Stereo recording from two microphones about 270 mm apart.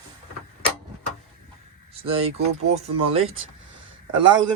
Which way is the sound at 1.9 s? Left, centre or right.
Right.